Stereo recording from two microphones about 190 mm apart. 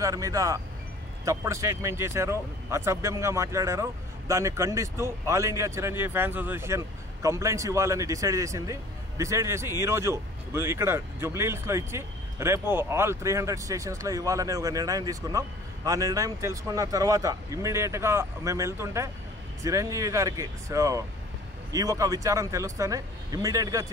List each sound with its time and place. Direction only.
0.0 s a man's voice: 15° right (ahead or behind)